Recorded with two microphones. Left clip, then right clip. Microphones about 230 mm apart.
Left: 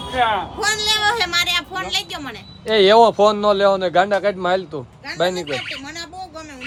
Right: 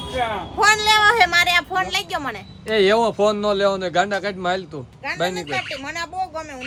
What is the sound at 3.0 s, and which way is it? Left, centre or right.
Speech, left.